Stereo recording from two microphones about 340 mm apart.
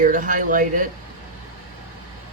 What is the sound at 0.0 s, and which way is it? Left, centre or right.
Speech, right.